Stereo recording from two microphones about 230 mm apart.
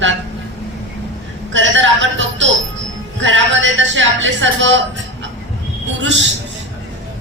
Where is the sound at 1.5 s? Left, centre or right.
Right.